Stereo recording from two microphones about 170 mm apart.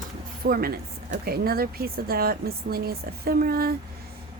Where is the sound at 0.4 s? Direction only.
60° right (ahead or behind).